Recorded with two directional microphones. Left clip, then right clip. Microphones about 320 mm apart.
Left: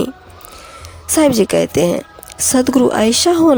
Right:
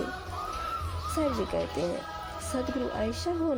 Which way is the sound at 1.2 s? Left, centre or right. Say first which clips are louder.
Left 18 dB; left.